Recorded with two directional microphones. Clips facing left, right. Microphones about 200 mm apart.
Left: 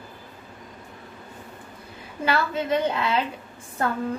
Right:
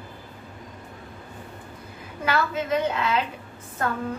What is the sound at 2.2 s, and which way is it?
A woman's voice, 30° left (ahead or behind).